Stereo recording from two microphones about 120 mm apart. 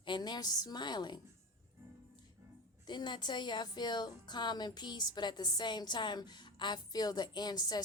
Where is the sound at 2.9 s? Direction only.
40° left (ahead or behind).